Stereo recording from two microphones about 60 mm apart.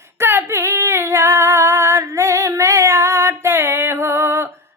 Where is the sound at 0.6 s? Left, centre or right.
Right.